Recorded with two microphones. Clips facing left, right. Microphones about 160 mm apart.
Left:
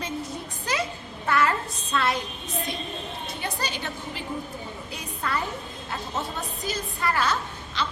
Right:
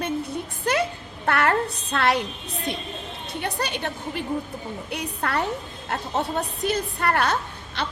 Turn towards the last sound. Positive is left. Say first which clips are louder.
# right 1 dB
turn(degrees=-60)  # may be behind; listen again after turning